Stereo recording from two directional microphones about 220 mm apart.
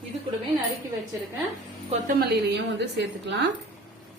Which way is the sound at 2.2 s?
50° right (ahead or behind).